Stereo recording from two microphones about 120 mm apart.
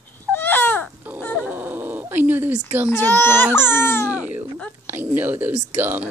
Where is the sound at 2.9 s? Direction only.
20° left (ahead or behind).